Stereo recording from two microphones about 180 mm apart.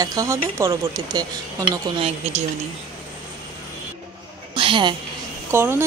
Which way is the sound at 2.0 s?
35° right (ahead or behind).